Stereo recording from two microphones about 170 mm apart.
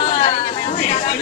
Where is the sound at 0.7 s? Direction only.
45° left (ahead or behind).